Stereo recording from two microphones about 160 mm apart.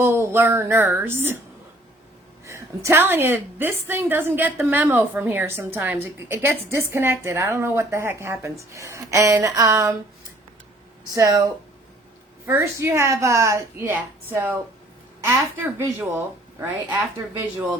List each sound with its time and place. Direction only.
0.0 s a woman's voice: 15° right (ahead or behind)
2.5 s a woman's voice: 15° right (ahead or behind)
11.1 s speech: 20° right (ahead or behind)
12.5 s a woman's voice: 15° right (ahead or behind)